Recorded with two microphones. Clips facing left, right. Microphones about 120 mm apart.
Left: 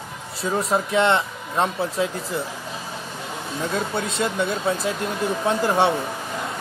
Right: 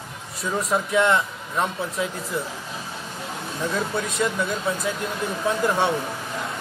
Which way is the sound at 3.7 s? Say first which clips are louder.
Even; 25° left (ahead or behind).